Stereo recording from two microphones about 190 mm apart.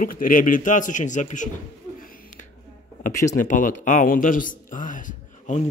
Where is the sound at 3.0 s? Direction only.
40° left (ahead or behind).